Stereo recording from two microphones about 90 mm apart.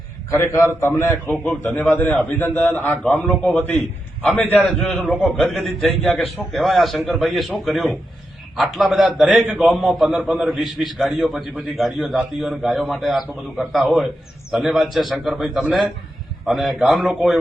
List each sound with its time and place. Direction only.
0.3 s a man's voice: 30° left (ahead or behind)
1.9 s a man's voice: 20° left (ahead or behind); by 17.2 s centre (ahead or behind)